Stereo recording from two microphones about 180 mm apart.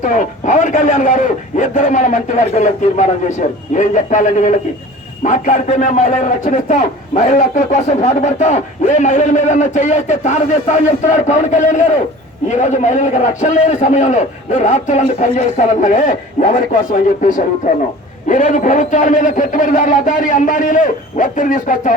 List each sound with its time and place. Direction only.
0.0 s a man's voice: 45° left (ahead or behind)